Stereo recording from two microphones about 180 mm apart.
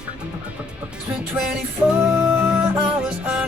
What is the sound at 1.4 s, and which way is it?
Music, 5° right (ahead or behind).